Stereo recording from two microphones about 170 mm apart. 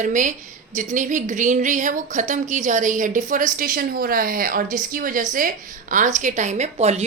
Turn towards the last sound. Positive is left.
turn(degrees=-40)  # may be behind; listen again after turning